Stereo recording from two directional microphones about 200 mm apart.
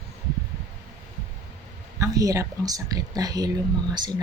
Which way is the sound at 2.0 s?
15° right (ahead or behind).